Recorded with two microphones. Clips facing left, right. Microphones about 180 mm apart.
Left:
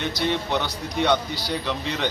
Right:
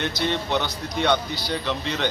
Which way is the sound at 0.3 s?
10° left (ahead or behind).